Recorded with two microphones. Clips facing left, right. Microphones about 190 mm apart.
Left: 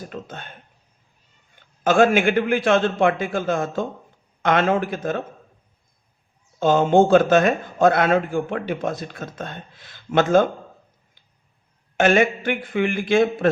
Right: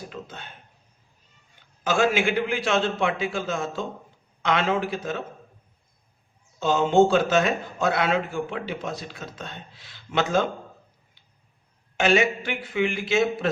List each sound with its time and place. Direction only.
0.1 s a sound: 50° left (ahead or behind)
1.8 s a man's voice: 55° left (ahead or behind)
6.6 s a man's voice: 50° left (ahead or behind)
11.9 s a man's voice: 55° left (ahead or behind)